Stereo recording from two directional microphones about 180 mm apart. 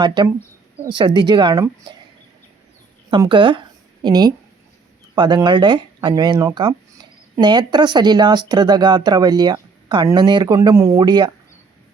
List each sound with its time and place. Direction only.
0.0 s speech: 25° right (ahead or behind)
3.1 s speech: 25° right (ahead or behind)